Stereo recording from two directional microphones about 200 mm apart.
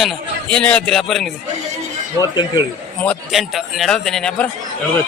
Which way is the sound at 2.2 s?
20° left (ahead or behind).